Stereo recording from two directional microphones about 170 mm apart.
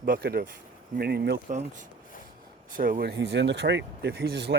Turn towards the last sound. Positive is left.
turn(degrees=-75)  # may be behind; listen again after turning